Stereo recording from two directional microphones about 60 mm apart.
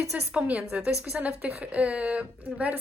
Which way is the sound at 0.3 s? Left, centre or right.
Right.